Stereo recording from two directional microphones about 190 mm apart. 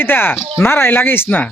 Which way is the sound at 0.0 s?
10° left (ahead or behind).